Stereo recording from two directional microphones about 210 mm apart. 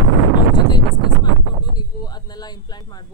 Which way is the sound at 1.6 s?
20° left (ahead or behind).